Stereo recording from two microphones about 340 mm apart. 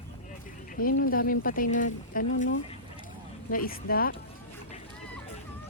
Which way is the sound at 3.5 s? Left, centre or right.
Left.